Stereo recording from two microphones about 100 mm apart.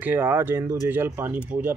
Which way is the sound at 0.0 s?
20° right (ahead or behind).